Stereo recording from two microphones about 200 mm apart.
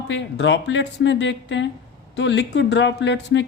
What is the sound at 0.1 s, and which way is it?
Speech, 65° left (ahead or behind).